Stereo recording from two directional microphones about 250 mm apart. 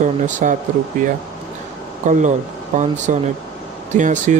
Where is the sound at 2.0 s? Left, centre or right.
Right.